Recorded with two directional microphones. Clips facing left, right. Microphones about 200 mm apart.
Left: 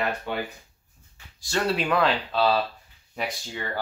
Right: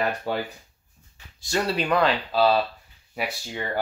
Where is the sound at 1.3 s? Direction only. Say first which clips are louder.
Right 1 dB; 15° right (ahead or behind).